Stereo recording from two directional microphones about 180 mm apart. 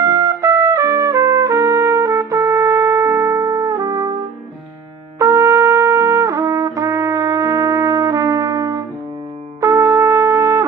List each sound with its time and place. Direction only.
0.0 s trumpet: 20° right (ahead or behind)
5.2 s trumpet: 15° right (ahead or behind)